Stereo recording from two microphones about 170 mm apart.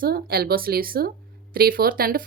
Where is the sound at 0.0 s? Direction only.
65° right (ahead or behind).